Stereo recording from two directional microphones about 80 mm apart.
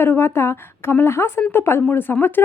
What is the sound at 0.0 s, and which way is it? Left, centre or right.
A woman's voice, left.